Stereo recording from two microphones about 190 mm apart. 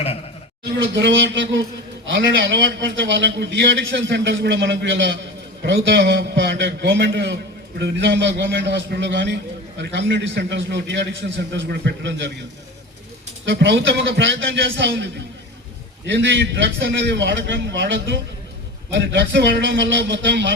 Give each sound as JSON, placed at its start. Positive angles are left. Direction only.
{"t": 0.9, "sound": "a man's voice", "side_deg": -70}
{"t": 13.4, "sound": "a man's voice", "side_deg": -70}